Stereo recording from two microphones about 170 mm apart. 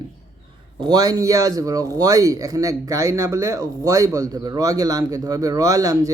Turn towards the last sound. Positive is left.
turn(degrees=-20)  # may be behind; listen again after turning